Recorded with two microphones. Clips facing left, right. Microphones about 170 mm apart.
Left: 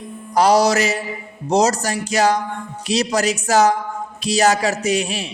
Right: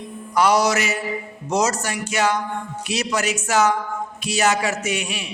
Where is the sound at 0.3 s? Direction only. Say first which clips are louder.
Left 3 dB; 35° left (ahead or behind).